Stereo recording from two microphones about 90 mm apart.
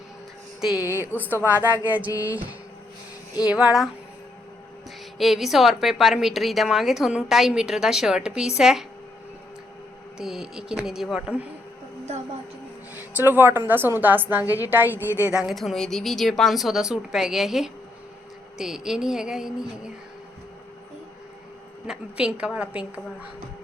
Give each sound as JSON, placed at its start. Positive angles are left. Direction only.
{"t": 0.8, "sound": "a woman's voice", "side_deg": 35}
{"t": 1.1, "sound": "music", "side_deg": -20}
{"t": 3.4, "sound": "a woman's voice", "side_deg": -10}
{"t": 5.1, "sound": "a woman's voice", "side_deg": 0}
{"t": 10.2, "sound": "a woman's voice", "side_deg": -5}
{"t": 12.9, "sound": "a woman's voice", "side_deg": -20}
{"t": 14.7, "sound": "music", "side_deg": -20}
{"t": 15.0, "sound": "a woman's voice", "side_deg": 30}
{"t": 15.3, "sound": "a woman's voice", "side_deg": -10}
{"t": 15.5, "sound": "a woman's voice", "side_deg": 5}
{"t": 21.8, "sound": "a woman's voice", "side_deg": -10}